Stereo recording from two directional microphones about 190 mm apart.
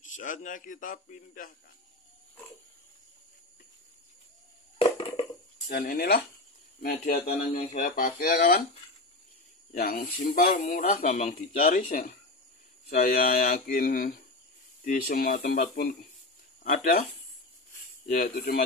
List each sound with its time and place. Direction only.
0.0 s speech: 45° left (ahead or behind)
4.7 s crushing: 30° left (ahead or behind)
5.7 s speech: 50° left (ahead or behind)
9.7 s speech: 50° left (ahead or behind)
18.1 s speech: 55° left (ahead or behind)